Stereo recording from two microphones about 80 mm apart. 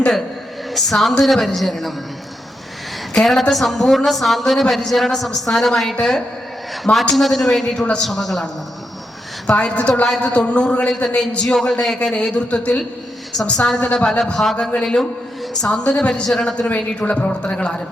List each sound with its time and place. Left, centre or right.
0.7 s speech: centre
3.1 s a woman's voice: centre
6.9 s a woman's voice: centre
7.2 s speech: centre
9.5 s a woman's voice: centre